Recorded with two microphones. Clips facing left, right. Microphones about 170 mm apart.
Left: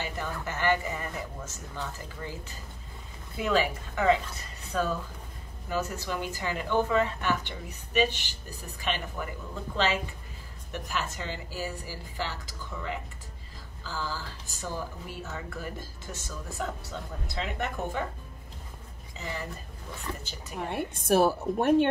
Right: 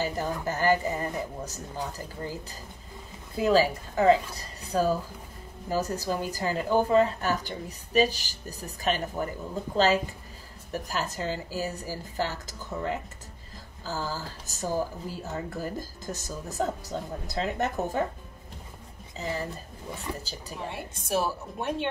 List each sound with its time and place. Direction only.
0.0 s speech: 35° right (ahead or behind)
10.9 s speech: 40° right (ahead or behind)
19.1 s speech: 35° right (ahead or behind)
20.1 s speech: 10° right (ahead or behind)
20.5 s a woman's voice: 55° left (ahead or behind)